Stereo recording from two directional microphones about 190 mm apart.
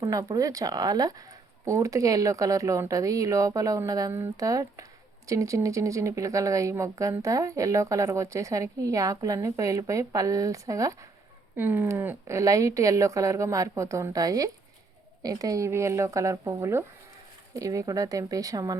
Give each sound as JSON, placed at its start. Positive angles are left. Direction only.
{"t": 0.0, "sound": "speech", "side_deg": -15}